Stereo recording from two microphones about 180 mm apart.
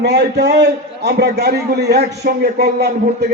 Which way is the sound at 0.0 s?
65° right (ahead or behind).